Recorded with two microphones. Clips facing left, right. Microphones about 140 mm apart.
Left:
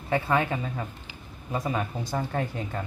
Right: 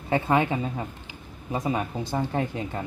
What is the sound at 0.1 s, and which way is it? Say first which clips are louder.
Speech: right 2 dB; 20° right (ahead or behind).